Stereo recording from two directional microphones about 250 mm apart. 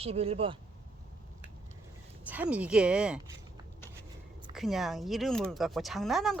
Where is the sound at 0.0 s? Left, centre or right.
Right.